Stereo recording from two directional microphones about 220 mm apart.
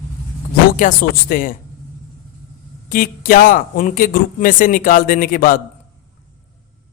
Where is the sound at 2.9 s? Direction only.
40° left (ahead or behind).